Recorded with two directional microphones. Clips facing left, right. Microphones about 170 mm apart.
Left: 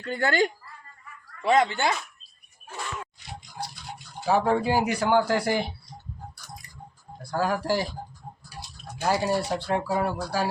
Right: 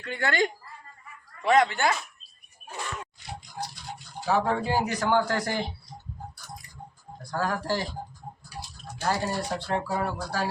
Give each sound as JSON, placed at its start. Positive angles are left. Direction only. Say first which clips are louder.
{"t": 0.0, "sound": "speech", "louder": "left 3 dB", "side_deg": 35}
{"t": 1.5, "sound": "speech", "louder": "even", "side_deg": 25}
{"t": 3.6, "sound": "speech", "louder": "left 1 dB", "side_deg": 15}
{"t": 7.2, "sound": "speech", "louder": "left 3 dB", "side_deg": 10}
{"t": 9.0, "sound": "speech", "louder": "left 4 dB", "side_deg": 10}